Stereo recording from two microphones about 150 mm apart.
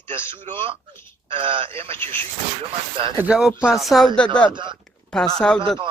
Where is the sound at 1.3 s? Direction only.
35° right (ahead or behind).